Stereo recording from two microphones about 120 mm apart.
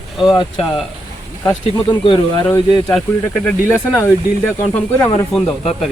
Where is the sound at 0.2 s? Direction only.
40° left (ahead or behind).